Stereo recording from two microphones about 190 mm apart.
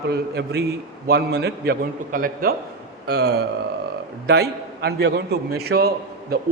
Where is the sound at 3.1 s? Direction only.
60° right (ahead or behind).